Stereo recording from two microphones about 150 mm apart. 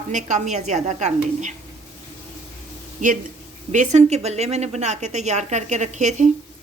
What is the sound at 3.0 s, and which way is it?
A woman's voice, 60° right (ahead or behind).